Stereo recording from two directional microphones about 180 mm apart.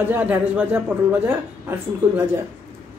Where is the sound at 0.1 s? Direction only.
10° right (ahead or behind).